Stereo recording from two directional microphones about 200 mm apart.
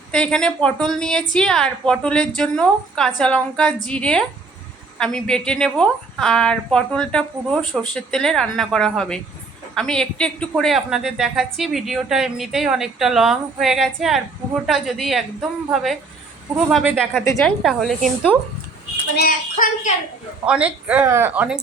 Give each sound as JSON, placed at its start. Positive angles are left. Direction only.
{"t": 0.1, "sound": "speech", "side_deg": 5}
{"t": 19.1, "sound": "a woman's voice", "side_deg": 45}
{"t": 20.4, "sound": "speech", "side_deg": -5}